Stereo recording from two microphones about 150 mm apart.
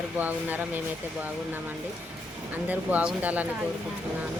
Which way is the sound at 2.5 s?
10° right (ahead or behind).